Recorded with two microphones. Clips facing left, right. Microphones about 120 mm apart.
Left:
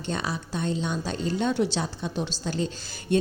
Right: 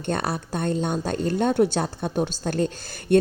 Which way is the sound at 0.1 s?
55° right (ahead or behind).